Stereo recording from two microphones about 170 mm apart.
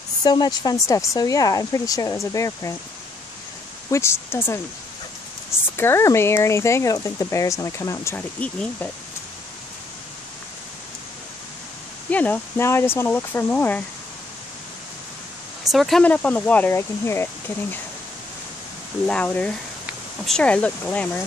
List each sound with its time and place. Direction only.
0.2 s speech: 25° left (ahead or behind)
3.9 s speech: 15° left (ahead or behind)
12.1 s speech: 10° left (ahead or behind)
15.7 s speech: centre (ahead or behind)
19.0 s speech: 5° left (ahead or behind)